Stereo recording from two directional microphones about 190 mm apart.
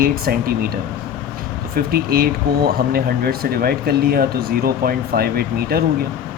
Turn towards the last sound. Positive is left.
turn(degrees=-55)  # may be behind; listen again after turning